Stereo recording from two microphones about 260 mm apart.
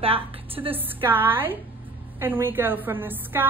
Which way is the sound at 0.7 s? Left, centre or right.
Centre.